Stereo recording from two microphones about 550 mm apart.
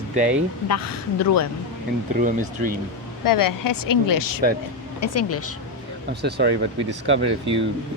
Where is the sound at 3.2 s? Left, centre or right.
Left.